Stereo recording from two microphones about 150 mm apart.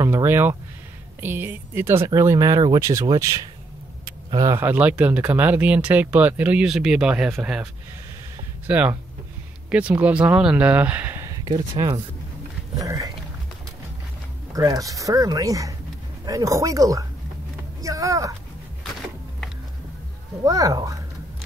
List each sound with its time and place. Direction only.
0.0 s speech: 15° right (ahead or behind)
8.6 s speech: 10° right (ahead or behind)
11.4 s speech: 30° right (ahead or behind)
14.5 s speech: 20° right (ahead or behind)
20.4 s speech: 25° right (ahead or behind)